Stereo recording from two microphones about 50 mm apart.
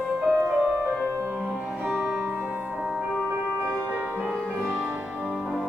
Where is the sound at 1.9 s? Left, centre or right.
Centre.